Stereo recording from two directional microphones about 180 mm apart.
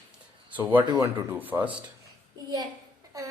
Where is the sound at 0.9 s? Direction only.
20° right (ahead or behind).